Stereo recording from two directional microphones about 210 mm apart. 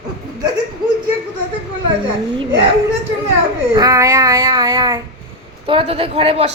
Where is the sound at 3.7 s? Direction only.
15° right (ahead or behind).